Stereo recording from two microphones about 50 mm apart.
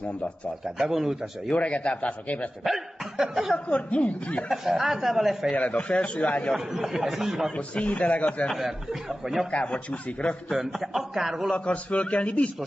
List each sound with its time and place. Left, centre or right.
0.7 s speech: centre
1.5 s a man's voice: left
2.6 s speech: centre
3.5 s a man's voice: left
4.5 s speech: centre
5.6 s a man's voice: left
6.5 s speech: centre
7.5 s a man's voice: left
9.2 s speech: centre
9.5 s a man's voice: left
10.5 s speech: centre
11.5 s a man's voice: left